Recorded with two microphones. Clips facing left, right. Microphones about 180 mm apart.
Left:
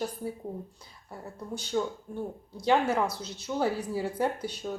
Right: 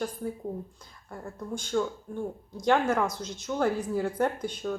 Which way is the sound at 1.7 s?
15° left (ahead or behind).